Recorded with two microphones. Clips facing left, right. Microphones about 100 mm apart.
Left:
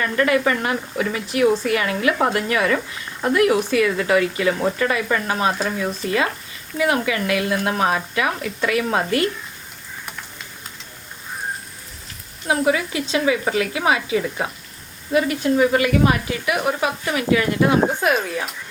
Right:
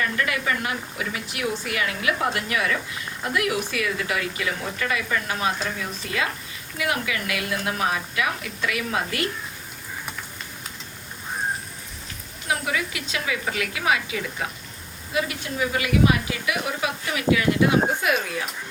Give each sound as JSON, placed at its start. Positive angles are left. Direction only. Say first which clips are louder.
{"t": 0.0, "sound": "a woman's voice", "louder": "left 7 dB", "side_deg": 40}
{"t": 6.7, "sound": "a woman's voice", "louder": "left 7 dB", "side_deg": 35}
{"t": 12.5, "sound": "speech", "louder": "left 7 dB", "side_deg": 30}
{"t": 15.1, "sound": "a woman's voice", "louder": "left 9 dB", "side_deg": 45}